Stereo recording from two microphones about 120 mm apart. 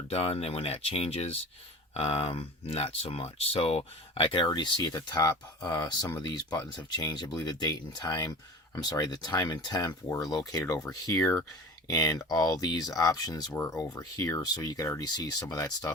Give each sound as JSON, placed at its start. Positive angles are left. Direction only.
{"t": 0.1, "sound": "speech", "side_deg": 55}
{"t": 11.1, "sound": "speech", "side_deg": 20}
{"t": 11.9, "sound": "speech", "side_deg": 30}